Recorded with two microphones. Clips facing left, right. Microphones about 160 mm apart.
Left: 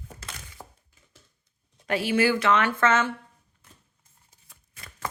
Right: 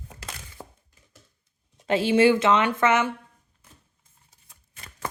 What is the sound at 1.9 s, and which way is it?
Speech, 25° right (ahead or behind).